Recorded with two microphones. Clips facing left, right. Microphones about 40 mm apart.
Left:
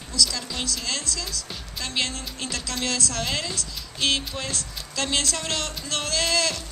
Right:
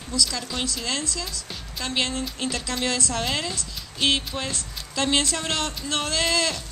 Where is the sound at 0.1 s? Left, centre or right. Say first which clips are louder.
Even; right.